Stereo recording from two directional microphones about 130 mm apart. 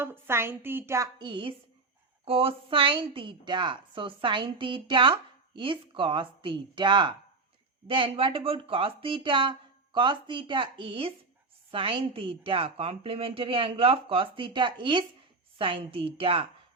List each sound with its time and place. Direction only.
0.0 s a woman's voice: 15° right (ahead or behind)
1.2 s a woman's voice: 40° right (ahead or behind)